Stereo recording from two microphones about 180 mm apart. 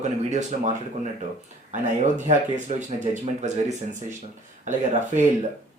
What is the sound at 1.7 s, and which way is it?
Speech, 40° right (ahead or behind).